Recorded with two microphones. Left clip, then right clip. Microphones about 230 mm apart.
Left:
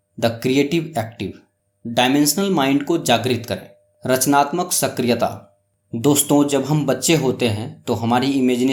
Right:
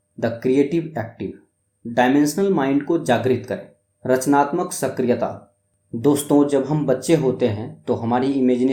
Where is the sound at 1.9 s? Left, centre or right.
Left.